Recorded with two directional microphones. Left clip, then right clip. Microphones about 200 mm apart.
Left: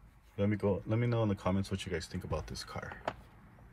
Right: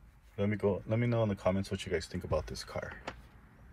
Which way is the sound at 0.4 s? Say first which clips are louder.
Right 1 dB; 15° left (ahead or behind).